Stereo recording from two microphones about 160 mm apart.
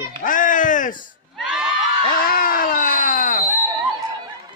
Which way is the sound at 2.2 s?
65° left (ahead or behind).